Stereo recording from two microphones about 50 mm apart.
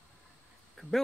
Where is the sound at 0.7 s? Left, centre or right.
Centre.